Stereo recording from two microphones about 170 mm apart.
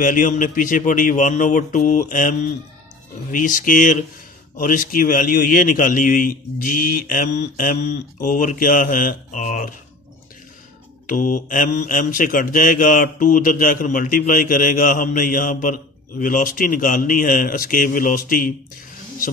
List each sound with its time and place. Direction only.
0.0 s speech: 50° left (ahead or behind)
11.1 s speech: 50° left (ahead or behind)